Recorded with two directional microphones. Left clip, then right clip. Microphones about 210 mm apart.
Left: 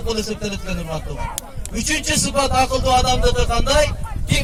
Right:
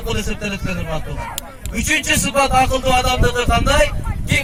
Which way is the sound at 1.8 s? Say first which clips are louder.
Right 4 dB; 55° left (ahead or behind).